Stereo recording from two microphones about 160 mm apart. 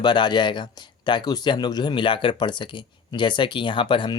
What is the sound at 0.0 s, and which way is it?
Speech, 30° left (ahead or behind).